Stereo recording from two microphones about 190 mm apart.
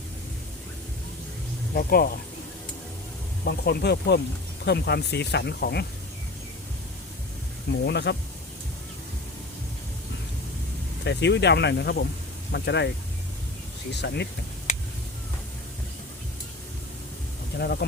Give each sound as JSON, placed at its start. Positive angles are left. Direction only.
{"t": 1.7, "sound": "speech", "side_deg": 50}
{"t": 3.4, "sound": "speech", "side_deg": 55}
{"t": 7.7, "sound": "speech", "side_deg": 65}
{"t": 11.0, "sound": "speech", "side_deg": 65}
{"t": 13.9, "sound": "speech", "side_deg": 65}
{"t": 14.7, "sound": "a sound", "side_deg": 40}
{"t": 17.6, "sound": "speech", "side_deg": 55}